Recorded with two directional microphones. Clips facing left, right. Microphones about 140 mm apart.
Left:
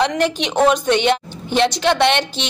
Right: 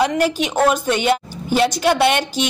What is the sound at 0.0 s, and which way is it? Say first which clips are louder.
A woman's voice: right 1 dB; 5° right (ahead or behind).